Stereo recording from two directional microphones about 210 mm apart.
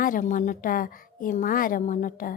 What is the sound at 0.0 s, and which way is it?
A woman's voice, 40° left (ahead or behind).